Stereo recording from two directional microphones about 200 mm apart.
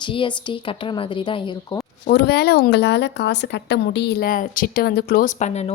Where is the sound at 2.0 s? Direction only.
55° left (ahead or behind).